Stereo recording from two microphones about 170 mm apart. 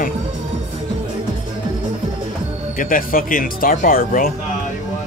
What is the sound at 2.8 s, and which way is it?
Speech, 55° left (ahead or behind).